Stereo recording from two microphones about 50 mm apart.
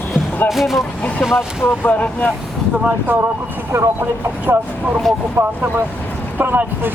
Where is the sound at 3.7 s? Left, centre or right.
Right.